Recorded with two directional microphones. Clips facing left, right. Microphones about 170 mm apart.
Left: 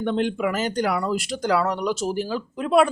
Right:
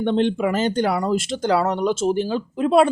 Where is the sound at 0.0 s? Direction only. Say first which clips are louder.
Right 3 dB; 25° right (ahead or behind).